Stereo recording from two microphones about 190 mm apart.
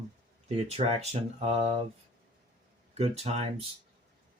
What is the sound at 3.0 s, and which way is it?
Speech, 30° right (ahead or behind).